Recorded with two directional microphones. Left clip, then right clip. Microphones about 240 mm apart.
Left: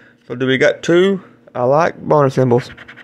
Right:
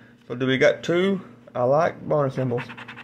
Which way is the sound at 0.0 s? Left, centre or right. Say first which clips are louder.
Left 7 dB; left.